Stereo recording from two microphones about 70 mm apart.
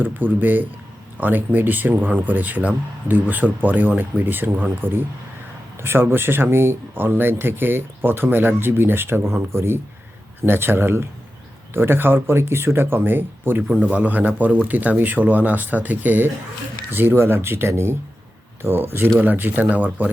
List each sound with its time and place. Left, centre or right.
0.0 s speech: right
13.6 s speech: centre